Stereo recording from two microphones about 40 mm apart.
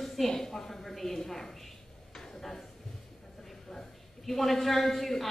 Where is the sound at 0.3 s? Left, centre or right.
Centre.